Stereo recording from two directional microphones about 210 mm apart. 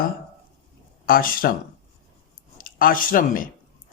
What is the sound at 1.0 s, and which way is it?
Speech, 40° left (ahead or behind).